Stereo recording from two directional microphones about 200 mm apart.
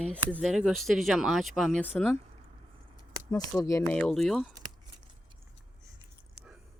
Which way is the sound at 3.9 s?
5° left (ahead or behind).